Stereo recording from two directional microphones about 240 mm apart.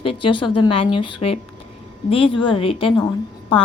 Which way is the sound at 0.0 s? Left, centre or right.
Left.